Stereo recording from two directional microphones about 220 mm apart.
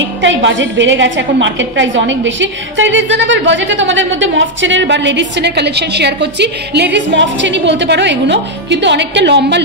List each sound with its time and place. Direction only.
0.2 s a woman's voice: 55° right (ahead or behind)